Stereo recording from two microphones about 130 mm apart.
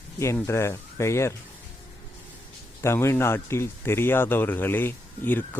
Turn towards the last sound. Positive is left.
turn(degrees=15)  # may be behind; listen again after turning